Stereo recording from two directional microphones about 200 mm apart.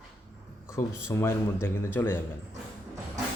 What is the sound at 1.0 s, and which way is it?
A man's voice, 15° left (ahead or behind).